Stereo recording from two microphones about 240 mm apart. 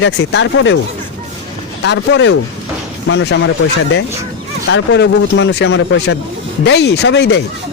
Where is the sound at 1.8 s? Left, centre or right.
Left.